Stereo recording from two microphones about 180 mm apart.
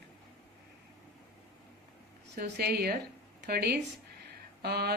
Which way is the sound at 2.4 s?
60° right (ahead or behind).